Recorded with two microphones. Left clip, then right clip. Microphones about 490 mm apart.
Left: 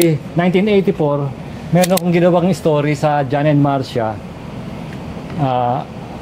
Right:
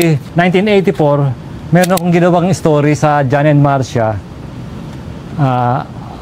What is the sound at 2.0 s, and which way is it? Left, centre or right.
A man's voice, right.